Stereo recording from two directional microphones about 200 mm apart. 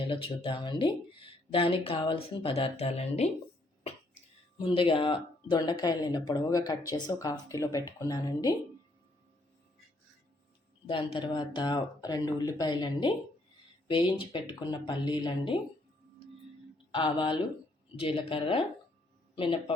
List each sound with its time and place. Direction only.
0.1 s speech: 25° left (ahead or behind)
4.5 s speech: 25° left (ahead or behind)
10.8 s speech: 25° left (ahead or behind)
16.9 s speech: 25° left (ahead or behind)